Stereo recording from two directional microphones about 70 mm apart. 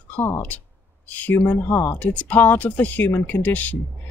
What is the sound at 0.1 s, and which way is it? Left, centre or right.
Speech, left.